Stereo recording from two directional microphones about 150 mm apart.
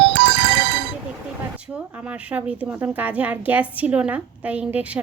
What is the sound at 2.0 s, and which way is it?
Speech, 10° right (ahead or behind).